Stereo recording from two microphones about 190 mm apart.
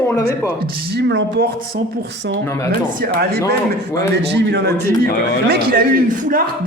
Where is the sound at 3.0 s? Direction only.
55° right (ahead or behind).